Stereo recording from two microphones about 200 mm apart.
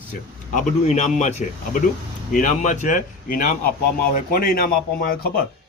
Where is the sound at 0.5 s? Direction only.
35° left (ahead or behind).